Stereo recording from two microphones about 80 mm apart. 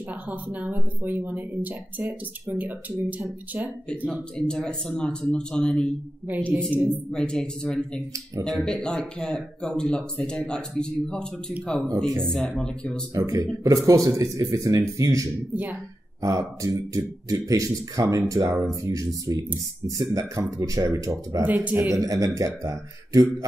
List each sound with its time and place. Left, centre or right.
0.3 s speech: right
4.5 s speech: centre
6.3 s speech: right
6.6 s speech: centre
12.3 s speech: centre
13.1 s a man's voice: right
15.5 s speech: right
16.2 s a man's voice: right
21.5 s speech: right
21.8 s a man's voice: right